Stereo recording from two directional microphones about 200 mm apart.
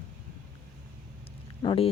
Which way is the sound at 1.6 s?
25° left (ahead or behind).